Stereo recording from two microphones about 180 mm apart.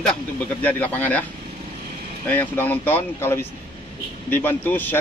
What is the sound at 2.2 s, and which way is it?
Speech, 10° left (ahead or behind).